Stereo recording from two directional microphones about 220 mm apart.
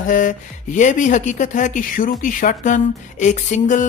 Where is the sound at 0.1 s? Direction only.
35° left (ahead or behind).